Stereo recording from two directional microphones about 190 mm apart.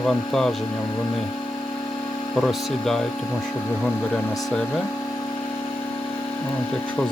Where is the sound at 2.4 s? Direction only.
Centre (ahead or behind).